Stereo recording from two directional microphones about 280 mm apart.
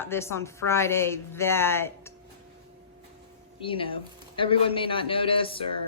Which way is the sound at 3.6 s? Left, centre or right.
Centre.